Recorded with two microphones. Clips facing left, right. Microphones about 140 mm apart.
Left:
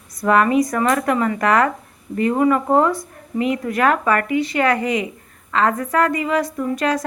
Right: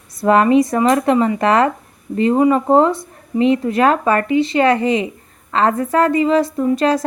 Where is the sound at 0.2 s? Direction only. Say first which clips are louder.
Right 3 dB; 30° right (ahead or behind).